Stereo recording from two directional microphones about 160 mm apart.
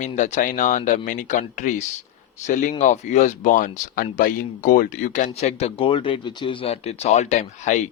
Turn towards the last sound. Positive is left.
turn(degrees=50)  # may be behind; listen again after turning